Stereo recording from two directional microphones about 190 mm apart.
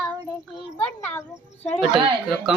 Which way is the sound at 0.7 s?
10° left (ahead or behind).